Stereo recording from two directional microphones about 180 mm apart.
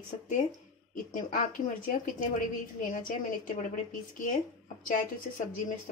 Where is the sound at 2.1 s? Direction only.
45° left (ahead or behind).